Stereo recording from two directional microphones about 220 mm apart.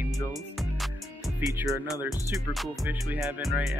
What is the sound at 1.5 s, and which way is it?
Music, 10° right (ahead or behind).